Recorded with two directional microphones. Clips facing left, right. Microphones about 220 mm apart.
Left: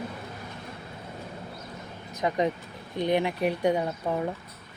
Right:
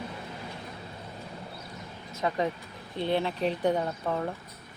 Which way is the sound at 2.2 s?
15° left (ahead or behind).